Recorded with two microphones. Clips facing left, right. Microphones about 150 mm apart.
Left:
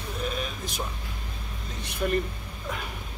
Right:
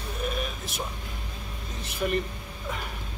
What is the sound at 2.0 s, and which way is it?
Speech, 5° right (ahead or behind).